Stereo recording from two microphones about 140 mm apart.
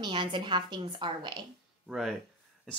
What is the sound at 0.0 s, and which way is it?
A woman's voice, 35° right (ahead or behind).